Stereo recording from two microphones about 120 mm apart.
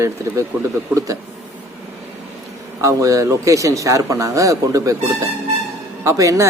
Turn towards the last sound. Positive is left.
turn(degrees=-30)  # may be behind; listen again after turning